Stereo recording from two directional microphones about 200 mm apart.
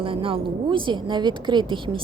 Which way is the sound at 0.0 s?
25° right (ahead or behind).